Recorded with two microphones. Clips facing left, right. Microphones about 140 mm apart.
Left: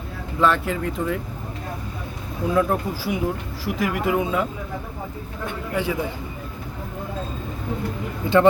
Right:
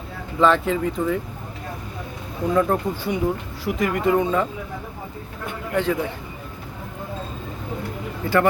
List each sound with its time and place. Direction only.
0.3 s speech: centre (ahead or behind)
2.6 s speech: 5° left (ahead or behind)
5.7 s a man's voice: 5° left (ahead or behind)
8.3 s a man's voice: 20° left (ahead or behind)